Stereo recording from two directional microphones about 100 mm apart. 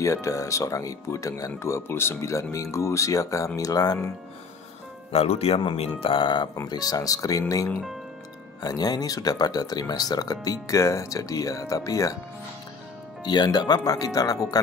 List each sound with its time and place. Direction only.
0.0 s speech: 30° left (ahead or behind)
5.1 s speech: 85° left
5.8 s speech: 65° left (ahead or behind)
6.7 s speech: 40° left (ahead or behind)
13.2 s speech: 45° left (ahead or behind)